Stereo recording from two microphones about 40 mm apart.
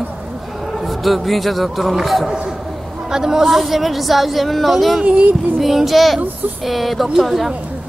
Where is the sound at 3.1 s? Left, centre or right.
Centre.